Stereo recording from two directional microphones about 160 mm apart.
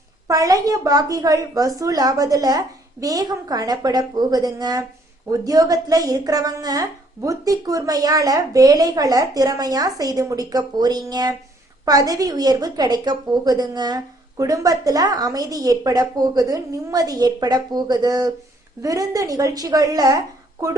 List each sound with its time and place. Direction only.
0.3 s a woman's voice: 20° right (ahead or behind)